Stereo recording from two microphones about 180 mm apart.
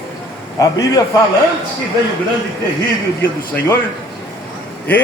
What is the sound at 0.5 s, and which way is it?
Speech, 20° left (ahead or behind).